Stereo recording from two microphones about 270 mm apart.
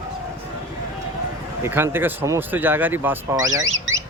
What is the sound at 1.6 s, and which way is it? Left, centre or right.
Speech, centre.